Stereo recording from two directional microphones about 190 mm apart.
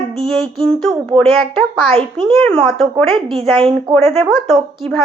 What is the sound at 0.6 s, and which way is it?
Speech, centre (ahead or behind).